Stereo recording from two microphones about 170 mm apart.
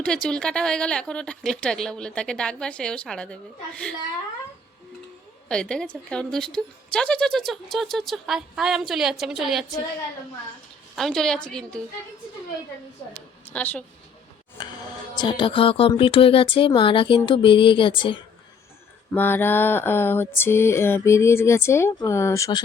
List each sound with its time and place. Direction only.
0.0 s speech: 5° left (ahead or behind)
5.5 s speech: 5° left (ahead or behind)
10.9 s speech: centre (ahead or behind)
13.5 s mantra: 10° left (ahead or behind)
14.6 s speech: 25° left (ahead or behind)
19.1 s mantra: 10° left (ahead or behind)